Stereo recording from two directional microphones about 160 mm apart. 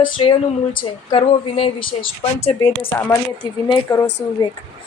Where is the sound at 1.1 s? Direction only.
35° left (ahead or behind).